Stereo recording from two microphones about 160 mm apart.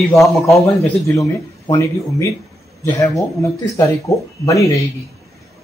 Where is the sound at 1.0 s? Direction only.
20° left (ahead or behind).